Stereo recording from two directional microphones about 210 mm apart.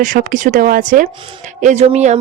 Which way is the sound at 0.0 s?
40° right (ahead or behind).